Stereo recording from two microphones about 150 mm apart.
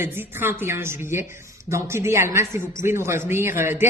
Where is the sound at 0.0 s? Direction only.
15° right (ahead or behind).